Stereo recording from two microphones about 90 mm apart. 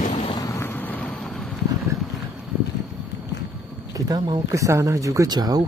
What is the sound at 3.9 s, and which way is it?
Speech, 45° right (ahead or behind).